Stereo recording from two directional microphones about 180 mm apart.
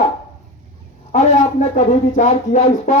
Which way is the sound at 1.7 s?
45° left (ahead or behind).